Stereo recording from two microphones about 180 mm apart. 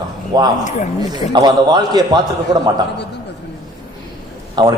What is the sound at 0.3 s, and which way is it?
A man's voice, 25° right (ahead or behind).